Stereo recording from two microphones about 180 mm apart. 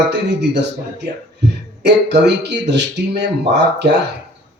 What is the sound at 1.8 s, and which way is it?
A man's voice, 70° right (ahead or behind).